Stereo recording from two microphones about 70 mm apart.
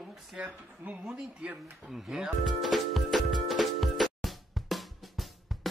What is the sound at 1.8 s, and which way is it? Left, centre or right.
Music, centre.